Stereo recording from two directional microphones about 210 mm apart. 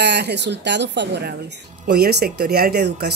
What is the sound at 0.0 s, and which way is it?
Speech, 55° right (ahead or behind).